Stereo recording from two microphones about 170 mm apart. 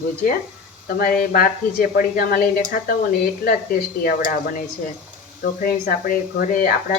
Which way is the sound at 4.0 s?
60° left (ahead or behind).